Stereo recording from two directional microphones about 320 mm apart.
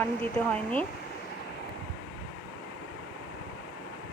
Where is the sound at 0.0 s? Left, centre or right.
Centre.